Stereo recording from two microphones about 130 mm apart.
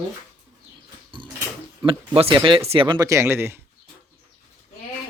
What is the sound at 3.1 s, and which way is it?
Speech, 20° right (ahead or behind).